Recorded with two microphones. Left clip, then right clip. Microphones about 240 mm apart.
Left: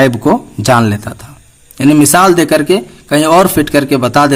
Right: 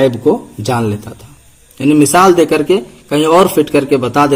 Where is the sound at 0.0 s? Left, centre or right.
Left.